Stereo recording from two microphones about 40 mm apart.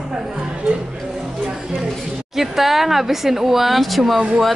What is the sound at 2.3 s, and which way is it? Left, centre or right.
Speech, centre.